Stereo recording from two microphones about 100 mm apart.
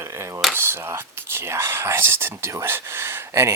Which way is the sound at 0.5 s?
25° right (ahead or behind).